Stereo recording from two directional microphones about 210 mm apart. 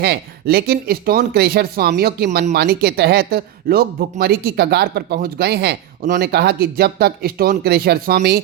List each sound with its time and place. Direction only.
0.0 s speech: 50° right (ahead or behind)